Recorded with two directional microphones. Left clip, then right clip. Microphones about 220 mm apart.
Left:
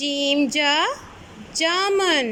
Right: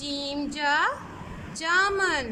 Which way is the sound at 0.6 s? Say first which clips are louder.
Left 4 dB; 20° left (ahead or behind).